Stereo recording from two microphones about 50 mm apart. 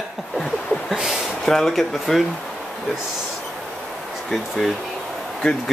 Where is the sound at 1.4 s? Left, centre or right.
Centre.